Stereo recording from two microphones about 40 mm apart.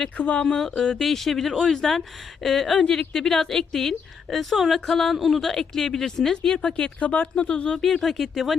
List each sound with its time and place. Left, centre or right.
0.2 s speech: left
0.4 s a woman's voice: centre; by 7.4 s left
7.4 s speech: left
8.0 s speech: centre